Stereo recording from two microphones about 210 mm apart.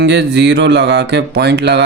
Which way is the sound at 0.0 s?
55° right (ahead or behind).